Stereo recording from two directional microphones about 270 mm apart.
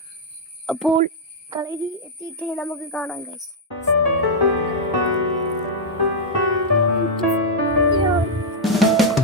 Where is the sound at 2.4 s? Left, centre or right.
Centre.